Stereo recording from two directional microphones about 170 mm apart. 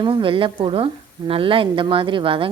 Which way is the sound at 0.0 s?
30° right (ahead or behind).